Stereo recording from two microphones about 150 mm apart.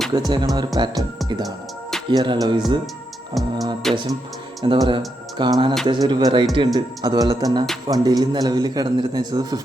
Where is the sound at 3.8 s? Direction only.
Centre (ahead or behind).